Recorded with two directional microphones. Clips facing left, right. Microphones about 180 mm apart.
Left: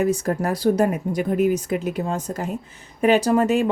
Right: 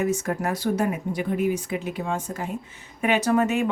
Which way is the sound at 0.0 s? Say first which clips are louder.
Left 4 dB; 35° left (ahead or behind).